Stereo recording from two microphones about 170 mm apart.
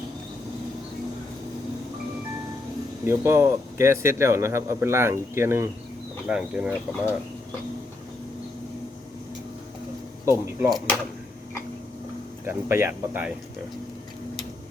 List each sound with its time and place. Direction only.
3.0 s speech: 15° right (ahead or behind)
10.2 s speech: 15° right (ahead or behind)
10.7 s speech: centre (ahead or behind)
12.5 s speech: 15° right (ahead or behind)